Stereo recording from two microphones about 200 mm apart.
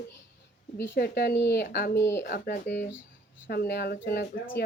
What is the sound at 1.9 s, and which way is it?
Speech, 15° left (ahead or behind).